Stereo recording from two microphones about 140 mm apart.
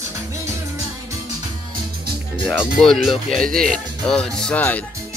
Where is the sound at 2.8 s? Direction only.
Centre (ahead or behind).